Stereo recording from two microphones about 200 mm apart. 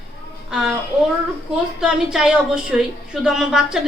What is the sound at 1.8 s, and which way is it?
A man's voice, 5° right (ahead or behind).